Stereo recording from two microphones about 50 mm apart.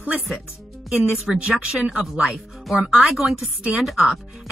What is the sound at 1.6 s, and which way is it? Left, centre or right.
Speech, centre.